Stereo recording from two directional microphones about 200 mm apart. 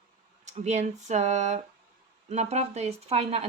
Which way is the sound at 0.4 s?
35° right (ahead or behind).